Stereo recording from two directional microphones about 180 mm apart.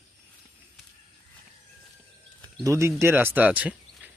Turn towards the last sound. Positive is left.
turn(degrees=-5)  # may be behind; listen again after turning